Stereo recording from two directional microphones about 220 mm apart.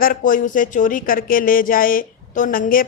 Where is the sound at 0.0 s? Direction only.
40° left (ahead or behind).